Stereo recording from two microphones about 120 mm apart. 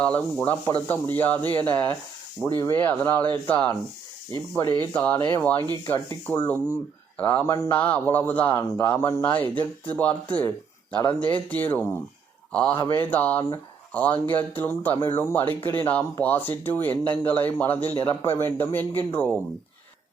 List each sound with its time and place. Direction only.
0.0 s speech: 10° left (ahead or behind)
1.4 s speech: 40° right (ahead or behind)
1.6 s speech: 15° left (ahead or behind)
4.9 s speech: 15° left (ahead or behind)